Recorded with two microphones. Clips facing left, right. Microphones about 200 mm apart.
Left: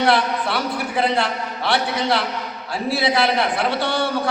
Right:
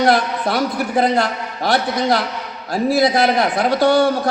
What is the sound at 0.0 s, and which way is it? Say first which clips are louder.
A man's voice: right 3 dB; 40° right (ahead or behind).